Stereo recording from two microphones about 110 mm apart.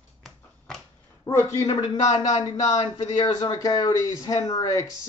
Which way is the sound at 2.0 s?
90° left.